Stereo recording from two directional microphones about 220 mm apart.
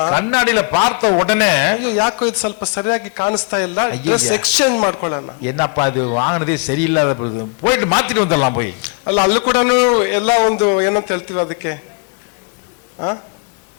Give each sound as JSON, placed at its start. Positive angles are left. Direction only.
{"t": 0.0, "sound": "a man's voice", "side_deg": 15}
{"t": 9.0, "sound": "a man's voice", "side_deg": 30}